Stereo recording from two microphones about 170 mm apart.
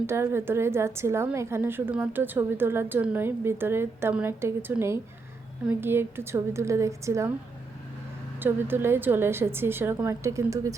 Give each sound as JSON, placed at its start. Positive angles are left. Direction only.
{"t": 0.0, "sound": "a woman's voice", "side_deg": -15}
{"t": 8.4, "sound": "a woman's voice", "side_deg": -10}